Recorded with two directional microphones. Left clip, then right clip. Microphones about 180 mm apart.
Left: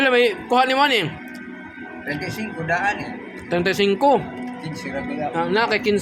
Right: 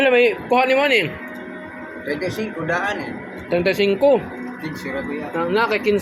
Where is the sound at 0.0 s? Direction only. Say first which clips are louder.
Right 2 dB; 25° left (ahead or behind).